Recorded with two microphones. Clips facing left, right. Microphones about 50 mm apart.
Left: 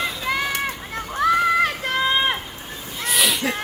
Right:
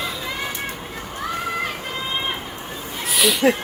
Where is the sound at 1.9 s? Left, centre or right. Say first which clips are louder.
Left 6 dB; left.